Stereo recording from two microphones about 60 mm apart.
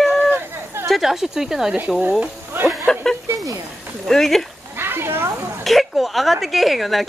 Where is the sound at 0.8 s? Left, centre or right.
Centre.